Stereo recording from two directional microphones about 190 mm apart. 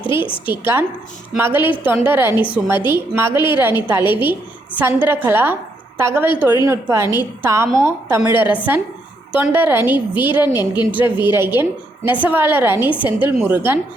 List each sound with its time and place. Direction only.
0.1 s a woman's voice: 25° left (ahead or behind)
0.4 s a woman's voice: 10° right (ahead or behind)